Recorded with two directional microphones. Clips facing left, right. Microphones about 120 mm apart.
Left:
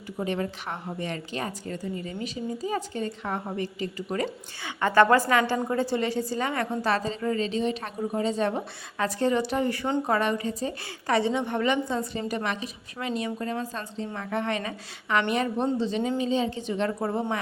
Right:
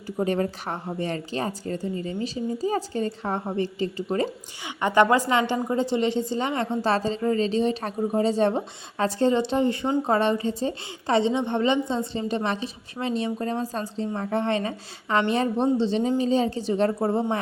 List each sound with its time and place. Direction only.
0.2 s a woman's voice: 40° right (ahead or behind)
4.6 s a woman's voice: 20° right (ahead or behind)